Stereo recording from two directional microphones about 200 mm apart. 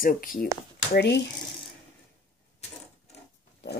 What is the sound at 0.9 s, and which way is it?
Speech, 60° left (ahead or behind).